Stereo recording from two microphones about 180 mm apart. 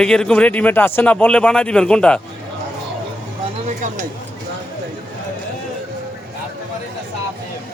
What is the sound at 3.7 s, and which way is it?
Speech, 45° right (ahead or behind).